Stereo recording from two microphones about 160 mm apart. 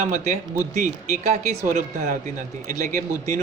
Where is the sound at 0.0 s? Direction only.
45° right (ahead or behind).